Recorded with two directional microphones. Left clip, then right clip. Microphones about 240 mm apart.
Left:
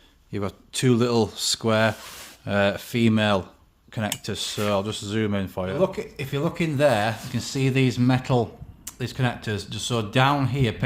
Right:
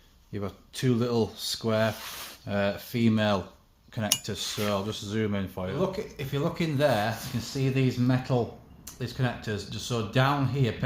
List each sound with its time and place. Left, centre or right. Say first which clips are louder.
0.3 s speech: left 7 dB; left